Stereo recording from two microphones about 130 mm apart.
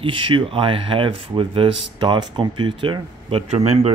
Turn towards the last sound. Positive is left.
turn(degrees=-55)  # may be behind; listen again after turning